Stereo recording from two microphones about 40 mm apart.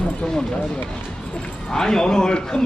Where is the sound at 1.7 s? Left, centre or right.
Centre.